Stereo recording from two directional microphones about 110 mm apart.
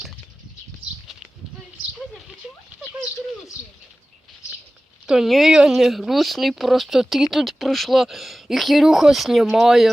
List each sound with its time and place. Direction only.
5.0 s speech: 5° right (ahead or behind)